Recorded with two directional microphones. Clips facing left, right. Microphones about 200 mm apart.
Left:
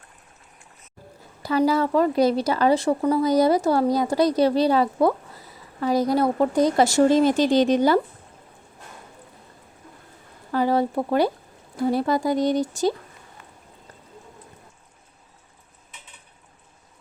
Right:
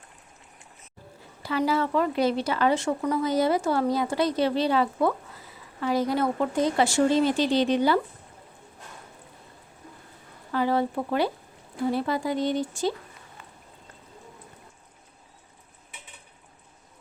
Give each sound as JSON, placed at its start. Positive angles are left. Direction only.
{"t": 1.4, "sound": "a woman's voice", "side_deg": 40}
{"t": 10.5, "sound": "a woman's voice", "side_deg": 40}